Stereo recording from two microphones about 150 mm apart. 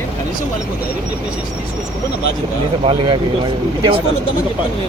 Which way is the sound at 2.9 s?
30° right (ahead or behind).